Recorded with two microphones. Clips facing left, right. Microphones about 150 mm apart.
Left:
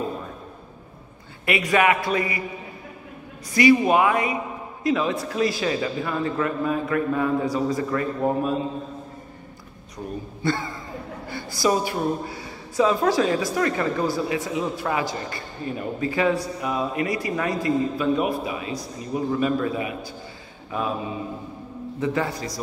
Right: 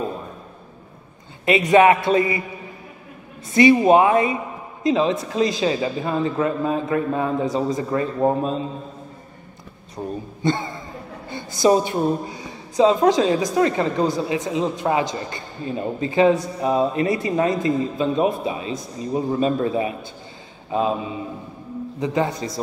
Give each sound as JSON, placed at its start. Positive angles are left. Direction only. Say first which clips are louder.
{"t": 1.4, "sound": "a woman's voice", "louder": "right 6 dB", "side_deg": -20}
{"t": 3.5, "sound": "a woman's voice", "louder": "right 4 dB", "side_deg": -25}
{"t": 9.9, "sound": "a man's voice", "louder": "right 3 dB", "side_deg": -20}
{"t": 22.0, "sound": "a woman's voice", "louder": "right 3 dB", "side_deg": -20}